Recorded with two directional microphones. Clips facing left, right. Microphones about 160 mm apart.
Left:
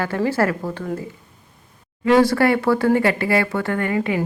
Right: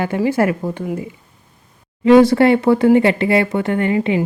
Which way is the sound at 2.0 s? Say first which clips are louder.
Right 5 dB; 20° right (ahead or behind).